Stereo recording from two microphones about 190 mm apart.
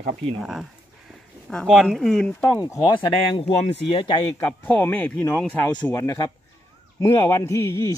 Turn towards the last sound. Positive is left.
turn(degrees=15)  # may be behind; listen again after turning